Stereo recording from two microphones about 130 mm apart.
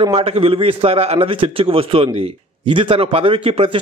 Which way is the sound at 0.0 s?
45° right (ahead or behind).